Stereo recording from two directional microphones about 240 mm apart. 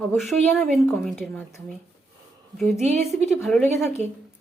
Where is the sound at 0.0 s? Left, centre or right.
Centre.